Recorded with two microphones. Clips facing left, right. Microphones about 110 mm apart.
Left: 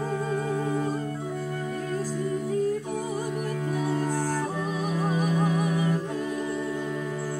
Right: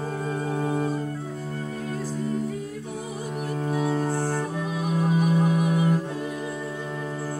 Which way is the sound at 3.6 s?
45° right (ahead or behind).